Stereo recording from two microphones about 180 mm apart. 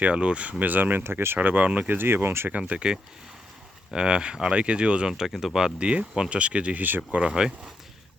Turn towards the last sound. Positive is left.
turn(degrees=-5)  # may be behind; listen again after turning